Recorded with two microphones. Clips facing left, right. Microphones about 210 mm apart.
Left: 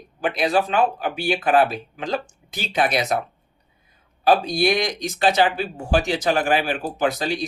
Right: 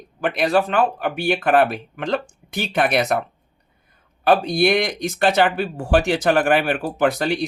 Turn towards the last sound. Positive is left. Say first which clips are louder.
# right 3 dB
turn(degrees=-60)  # may be behind; listen again after turning